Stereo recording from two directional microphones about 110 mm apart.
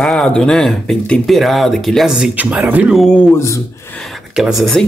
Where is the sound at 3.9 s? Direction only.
Centre (ahead or behind).